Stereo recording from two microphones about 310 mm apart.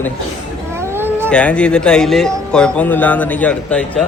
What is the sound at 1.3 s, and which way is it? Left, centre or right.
Speech, centre.